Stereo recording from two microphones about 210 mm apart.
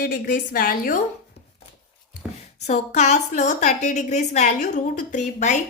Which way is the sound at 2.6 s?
35° left (ahead or behind).